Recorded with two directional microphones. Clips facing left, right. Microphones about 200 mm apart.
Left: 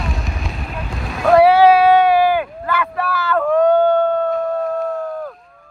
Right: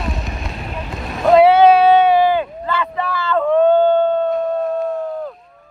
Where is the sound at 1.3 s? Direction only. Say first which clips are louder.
Right 1 dB; 20° right (ahead or behind).